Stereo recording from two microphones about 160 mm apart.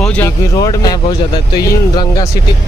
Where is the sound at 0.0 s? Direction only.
10° left (ahead or behind).